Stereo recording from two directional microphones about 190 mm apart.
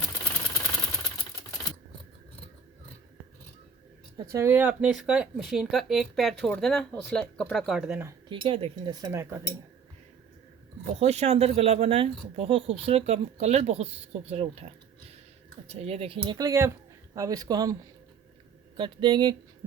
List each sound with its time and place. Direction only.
4.2 s speech: 15° right (ahead or behind)
8.3 s speech: 30° right (ahead or behind)
11.0 s speech: 35° right (ahead or behind); by 17.7 s 20° right (ahead or behind)
18.8 s speech: 25° right (ahead or behind)